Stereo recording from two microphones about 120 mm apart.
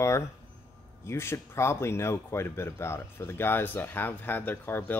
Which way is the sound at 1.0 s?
20° left (ahead or behind).